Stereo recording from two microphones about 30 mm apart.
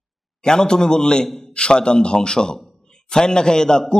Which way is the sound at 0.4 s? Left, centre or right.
Left.